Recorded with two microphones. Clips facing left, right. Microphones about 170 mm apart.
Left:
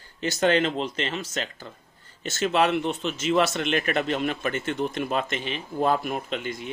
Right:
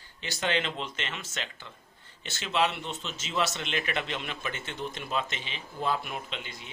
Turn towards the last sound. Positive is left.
turn(degrees=50)  # may be behind; listen again after turning